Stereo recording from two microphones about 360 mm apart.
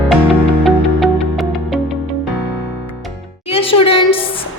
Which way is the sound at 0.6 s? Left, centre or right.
Centre.